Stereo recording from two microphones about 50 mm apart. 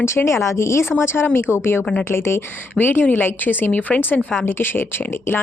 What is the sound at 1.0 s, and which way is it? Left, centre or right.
Speech, left.